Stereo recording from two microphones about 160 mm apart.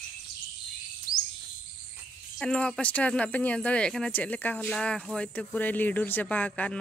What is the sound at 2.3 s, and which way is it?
Speech, 5° left (ahead or behind).